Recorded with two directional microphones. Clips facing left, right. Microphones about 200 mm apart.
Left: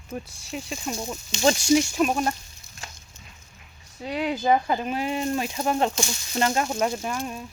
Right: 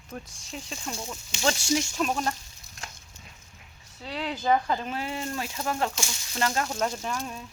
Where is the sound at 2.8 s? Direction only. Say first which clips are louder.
Even; centre (ahead or behind).